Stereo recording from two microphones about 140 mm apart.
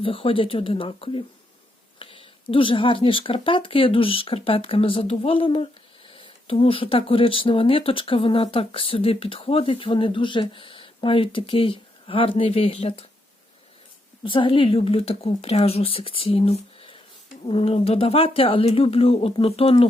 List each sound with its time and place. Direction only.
0.0 s speech: 40° left (ahead or behind)
14.3 s a woman's voice: 40° left (ahead or behind)